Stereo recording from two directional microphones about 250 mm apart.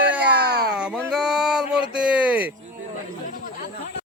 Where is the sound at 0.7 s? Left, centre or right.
Centre.